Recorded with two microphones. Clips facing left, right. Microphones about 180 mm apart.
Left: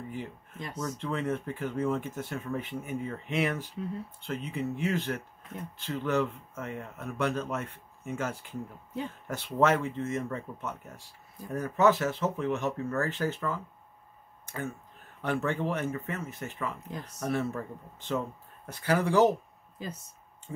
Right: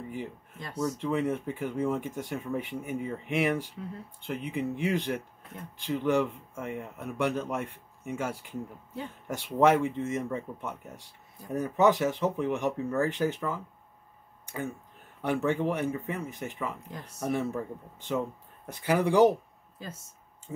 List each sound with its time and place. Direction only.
0.1 s speech: 15° right (ahead or behind)
14.4 s a sound: 15° right (ahead or behind)
15.2 s speech: 15° right (ahead or behind)